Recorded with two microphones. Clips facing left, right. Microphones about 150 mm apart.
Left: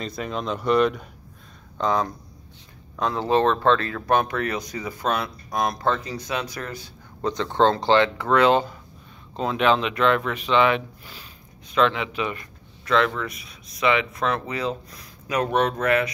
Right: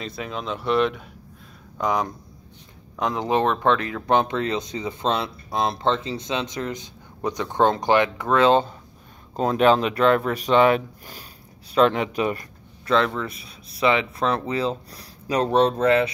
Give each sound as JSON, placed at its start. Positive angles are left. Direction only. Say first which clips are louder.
{"t": 0.0, "sound": "speech", "louder": "left 2 dB", "side_deg": 0}
{"t": 1.8, "sound": "speech", "louder": "left 1 dB", "side_deg": -15}
{"t": 9.4, "sound": "speech", "louder": "right 3 dB", "side_deg": -40}